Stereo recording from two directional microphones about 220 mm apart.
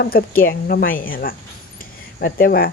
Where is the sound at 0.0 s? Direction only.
40° left (ahead or behind).